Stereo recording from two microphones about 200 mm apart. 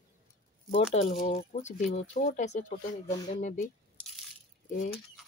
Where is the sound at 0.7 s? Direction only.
35° left (ahead or behind).